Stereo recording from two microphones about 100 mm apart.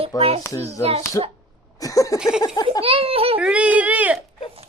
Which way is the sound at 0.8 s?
90° right.